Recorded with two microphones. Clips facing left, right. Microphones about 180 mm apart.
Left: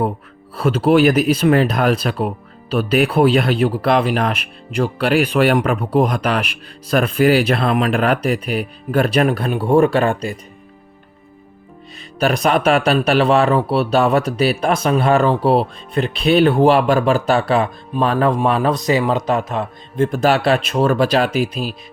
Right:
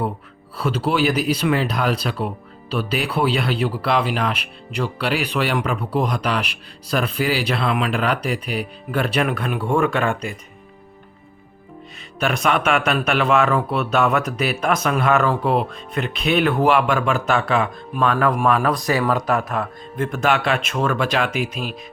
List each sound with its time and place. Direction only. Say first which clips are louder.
0.5 s speech: left 7 dB; 55° left (ahead or behind); by 10.3 s 35° left (ahead or behind)
12.2 s speech: left 4 dB; 35° left (ahead or behind)
20.1 s speech: left 4 dB; 35° left (ahead or behind)